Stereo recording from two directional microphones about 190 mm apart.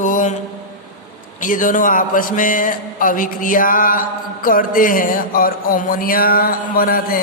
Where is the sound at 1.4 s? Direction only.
45° left (ahead or behind).